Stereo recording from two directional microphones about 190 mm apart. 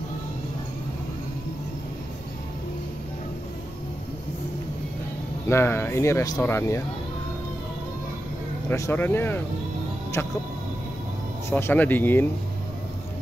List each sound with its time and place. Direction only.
5.5 s speech: 15° left (ahead or behind)
8.6 s speech: 15° left (ahead or behind)
11.5 s speech: 10° left (ahead or behind)